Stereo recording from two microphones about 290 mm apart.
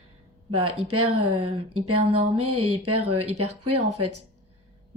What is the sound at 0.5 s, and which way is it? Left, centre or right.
Speech, right.